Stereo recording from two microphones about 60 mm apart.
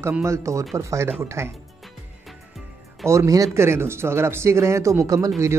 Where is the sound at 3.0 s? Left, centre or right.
Right.